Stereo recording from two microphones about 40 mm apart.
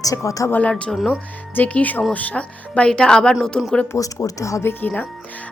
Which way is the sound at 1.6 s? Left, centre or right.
Left.